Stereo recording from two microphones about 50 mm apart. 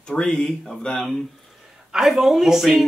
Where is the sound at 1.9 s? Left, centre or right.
Centre.